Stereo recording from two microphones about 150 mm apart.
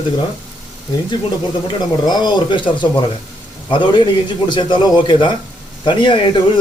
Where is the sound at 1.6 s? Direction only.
30° left (ahead or behind).